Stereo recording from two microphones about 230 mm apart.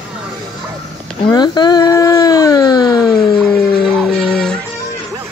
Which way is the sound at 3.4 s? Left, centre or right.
Centre.